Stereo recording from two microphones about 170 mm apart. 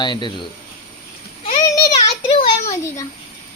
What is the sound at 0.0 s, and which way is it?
Speech, 25° left (ahead or behind).